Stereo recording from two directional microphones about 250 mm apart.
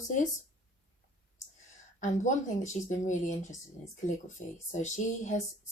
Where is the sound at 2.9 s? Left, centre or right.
Left.